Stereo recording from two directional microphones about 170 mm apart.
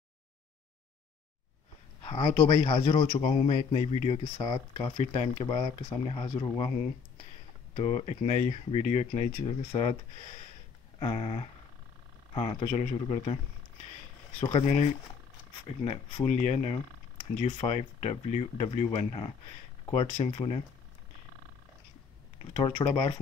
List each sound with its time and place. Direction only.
2.0 s a man's voice: 30° left (ahead or behind)
7.7 s a man's voice: 35° left (ahead or behind)
11.0 s a man's voice: 35° left (ahead or behind)
12.6 s a man's voice: 45° left (ahead or behind)
14.4 s a man's voice: 35° left (ahead or behind)
22.5 s a man's voice: 35° left (ahead or behind)